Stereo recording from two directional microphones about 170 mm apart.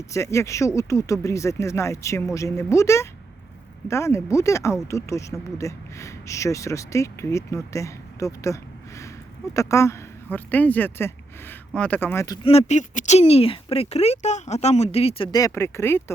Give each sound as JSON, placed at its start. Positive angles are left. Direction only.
{"t": 0.1, "sound": "speech", "side_deg": 15}
{"t": 9.6, "sound": "speech", "side_deg": 20}
{"t": 12.5, "sound": "speech", "side_deg": 40}
{"t": 15.3, "sound": "speech", "side_deg": 20}